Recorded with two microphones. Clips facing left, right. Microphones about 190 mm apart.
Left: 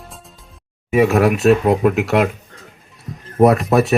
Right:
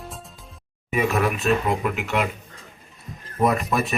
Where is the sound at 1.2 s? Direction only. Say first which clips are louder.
Left 8 dB; 70° left (ahead or behind).